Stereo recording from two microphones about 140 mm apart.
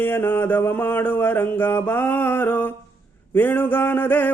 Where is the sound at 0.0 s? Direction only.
15° left (ahead or behind).